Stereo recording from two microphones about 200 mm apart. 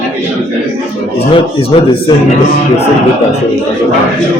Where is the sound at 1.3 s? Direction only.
25° left (ahead or behind).